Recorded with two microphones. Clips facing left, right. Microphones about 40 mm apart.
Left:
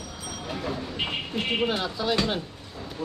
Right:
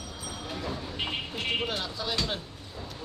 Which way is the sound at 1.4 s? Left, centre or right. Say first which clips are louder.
Left 6 dB; centre.